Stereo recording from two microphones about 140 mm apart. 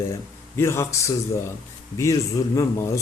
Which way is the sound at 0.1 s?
20° left (ahead or behind).